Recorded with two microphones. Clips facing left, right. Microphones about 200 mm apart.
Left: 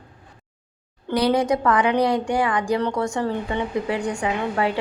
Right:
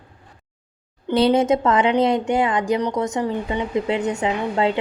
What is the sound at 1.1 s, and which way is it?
A woman's voice, 25° right (ahead or behind).